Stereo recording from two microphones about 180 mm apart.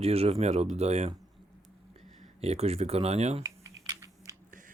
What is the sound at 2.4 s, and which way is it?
Speech, 35° right (ahead or behind).